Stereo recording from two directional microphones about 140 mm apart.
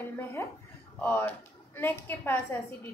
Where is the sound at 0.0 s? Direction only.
15° left (ahead or behind).